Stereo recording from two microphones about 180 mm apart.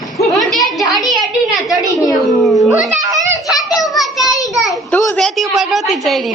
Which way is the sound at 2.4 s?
Centre (ahead or behind).